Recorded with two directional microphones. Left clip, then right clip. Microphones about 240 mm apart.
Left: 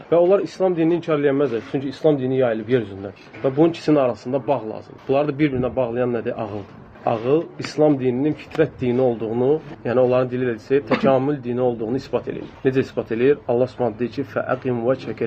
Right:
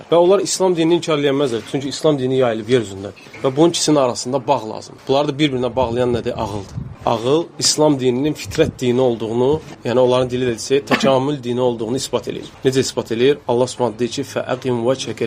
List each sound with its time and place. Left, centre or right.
0.1 s a man's voice: right